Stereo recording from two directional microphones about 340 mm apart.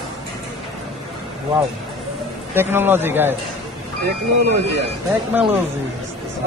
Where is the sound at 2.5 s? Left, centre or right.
Centre.